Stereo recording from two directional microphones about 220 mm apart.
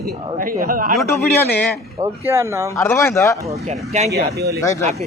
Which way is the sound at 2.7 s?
15° left (ahead or behind).